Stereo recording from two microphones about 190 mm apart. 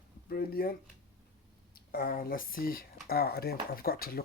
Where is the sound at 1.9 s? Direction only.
50° left (ahead or behind).